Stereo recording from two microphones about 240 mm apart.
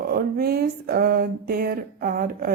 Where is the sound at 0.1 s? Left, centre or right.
Right.